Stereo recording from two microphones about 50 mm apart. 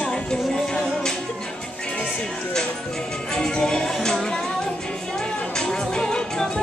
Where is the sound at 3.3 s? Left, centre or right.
Centre.